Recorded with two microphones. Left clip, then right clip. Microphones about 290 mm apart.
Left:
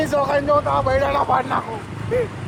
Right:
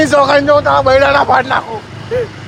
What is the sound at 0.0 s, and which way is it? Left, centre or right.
Speech, right.